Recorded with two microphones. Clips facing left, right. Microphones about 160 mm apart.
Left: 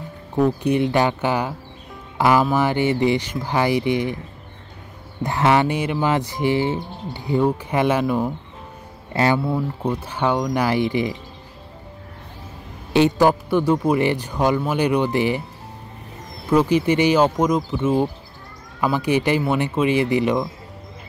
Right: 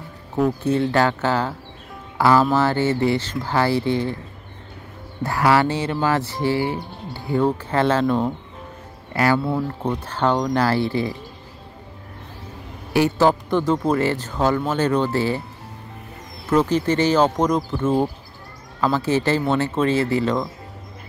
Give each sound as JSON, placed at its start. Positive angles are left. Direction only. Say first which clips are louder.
{"t": 0.4, "sound": "speech", "louder": "left 1 dB", "side_deg": 15}
{"t": 5.2, "sound": "speech", "louder": "even", "side_deg": 20}
{"t": 9.1, "sound": "speech", "louder": "even", "side_deg": 25}
{"t": 9.8, "sound": "speech", "louder": "even", "side_deg": 10}
{"t": 12.9, "sound": "speech", "louder": "left 2 dB", "side_deg": 20}
{"t": 13.3, "sound": "speech", "louder": "left 1 dB", "side_deg": 10}
{"t": 16.4, "sound": "speech", "louder": "left 1 dB", "side_deg": 10}